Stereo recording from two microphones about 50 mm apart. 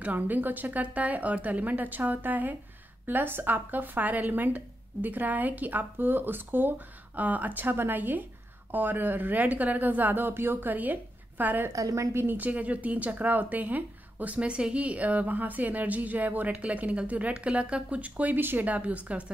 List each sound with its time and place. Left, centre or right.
0.0 s speech: right
11.7 s a woman's voice: right
12.2 s a woman's voice: right